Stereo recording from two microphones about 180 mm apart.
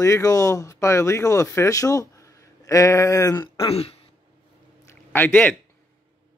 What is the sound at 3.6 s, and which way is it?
Speech, 35° left (ahead or behind).